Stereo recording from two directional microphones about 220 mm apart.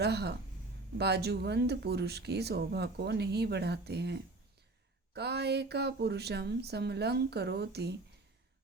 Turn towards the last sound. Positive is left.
turn(degrees=-50)  # may be behind; listen again after turning